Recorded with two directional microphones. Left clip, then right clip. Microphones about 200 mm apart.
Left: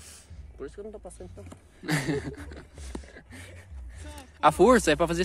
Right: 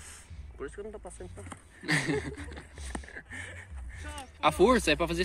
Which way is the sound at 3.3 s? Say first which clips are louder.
Right 7 dB; 45° left (ahead or behind).